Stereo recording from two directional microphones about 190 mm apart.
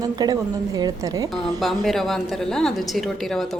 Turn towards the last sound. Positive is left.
turn(degrees=0)  # may be behind; listen again after turning